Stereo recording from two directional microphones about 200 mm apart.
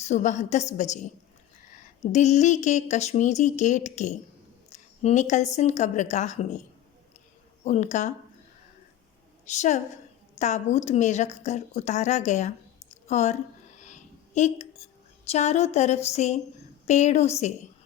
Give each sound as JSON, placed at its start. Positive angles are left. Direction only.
{"t": 0.0, "sound": "a woman's voice", "side_deg": 35}
{"t": 2.0, "sound": "a woman's voice", "side_deg": 35}
{"t": 7.6, "sound": "a woman's voice", "side_deg": 35}
{"t": 9.5, "sound": "a woman's voice", "side_deg": 35}
{"t": 13.1, "sound": "a sound", "side_deg": 35}
{"t": 15.3, "sound": "a woman's voice", "side_deg": 35}